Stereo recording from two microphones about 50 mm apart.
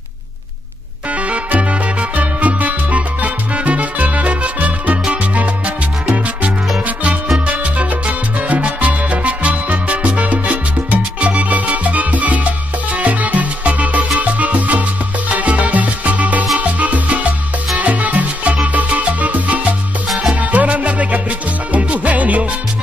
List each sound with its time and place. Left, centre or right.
1.1 s music: right
7.3 s salsa music: right
16.5 s music: right